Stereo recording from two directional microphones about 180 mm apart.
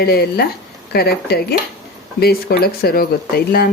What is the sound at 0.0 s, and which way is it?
Speech, 60° left (ahead or behind).